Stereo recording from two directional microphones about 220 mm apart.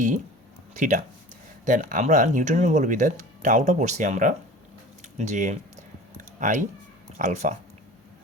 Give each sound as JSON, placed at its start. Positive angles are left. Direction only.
{"t": 0.7, "sound": "speech", "side_deg": -35}
{"t": 6.1, "sound": "a sound", "side_deg": -35}
{"t": 7.2, "sound": "speech", "side_deg": -30}